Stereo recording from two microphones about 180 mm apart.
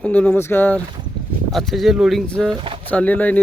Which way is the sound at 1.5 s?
Centre (ahead or behind).